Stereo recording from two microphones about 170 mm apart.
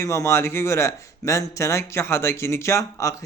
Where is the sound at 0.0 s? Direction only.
15° left (ahead or behind).